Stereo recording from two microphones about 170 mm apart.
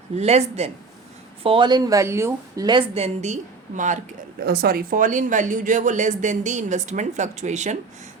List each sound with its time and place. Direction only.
0.2 s speech: 40° right (ahead or behind)
1.5 s speech: 25° right (ahead or behind)
2.9 s speech: 40° right (ahead or behind)
4.4 s speech: 60° right (ahead or behind); by 7.8 s 45° right (ahead or behind)